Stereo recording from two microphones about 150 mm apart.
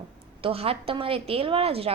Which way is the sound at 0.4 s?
40° right (ahead or behind).